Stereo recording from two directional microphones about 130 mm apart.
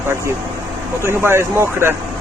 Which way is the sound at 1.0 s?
20° right (ahead or behind).